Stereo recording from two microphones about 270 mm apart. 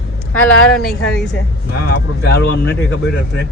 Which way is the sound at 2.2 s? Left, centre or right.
Left.